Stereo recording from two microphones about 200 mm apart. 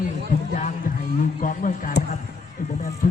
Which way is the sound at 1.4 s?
40° left (ahead or behind).